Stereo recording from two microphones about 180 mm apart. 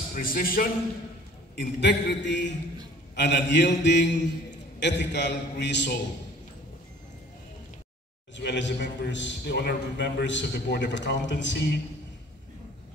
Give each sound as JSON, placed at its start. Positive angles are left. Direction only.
{"t": 0.1, "sound": "a man's voice", "side_deg": 50}
{"t": 1.5, "sound": "a man's voice", "side_deg": 70}
{"t": 8.4, "sound": "a man's voice", "side_deg": 80}